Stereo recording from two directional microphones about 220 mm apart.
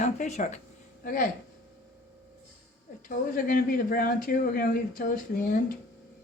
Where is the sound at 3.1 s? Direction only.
40° left (ahead or behind).